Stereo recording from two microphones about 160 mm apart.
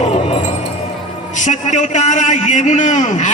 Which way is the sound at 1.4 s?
50° left (ahead or behind).